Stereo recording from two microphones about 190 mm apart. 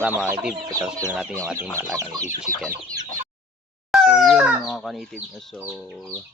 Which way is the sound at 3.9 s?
5° right (ahead or behind).